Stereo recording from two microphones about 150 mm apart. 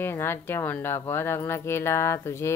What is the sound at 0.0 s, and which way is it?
Speech, 15° left (ahead or behind).